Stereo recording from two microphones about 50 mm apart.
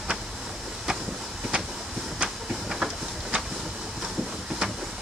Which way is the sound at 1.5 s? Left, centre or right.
Right.